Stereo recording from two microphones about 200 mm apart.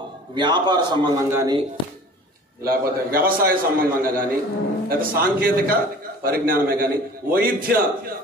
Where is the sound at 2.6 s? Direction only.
45° right (ahead or behind).